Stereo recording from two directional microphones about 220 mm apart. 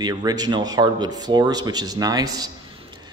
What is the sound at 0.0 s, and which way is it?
Speech, 15° right (ahead or behind).